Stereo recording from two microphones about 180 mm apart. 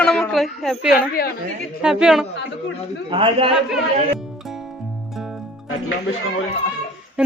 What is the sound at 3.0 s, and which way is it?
Speech, 30° right (ahead or behind).